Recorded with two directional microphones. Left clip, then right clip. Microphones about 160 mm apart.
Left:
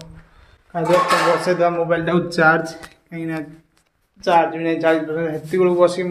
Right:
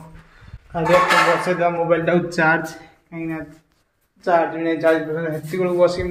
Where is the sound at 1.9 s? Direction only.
5° left (ahead or behind).